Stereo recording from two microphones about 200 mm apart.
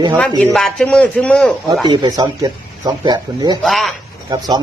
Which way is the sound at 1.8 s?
20° right (ahead or behind).